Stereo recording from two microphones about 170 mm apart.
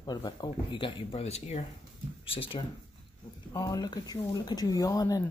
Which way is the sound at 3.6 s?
20° left (ahead or behind).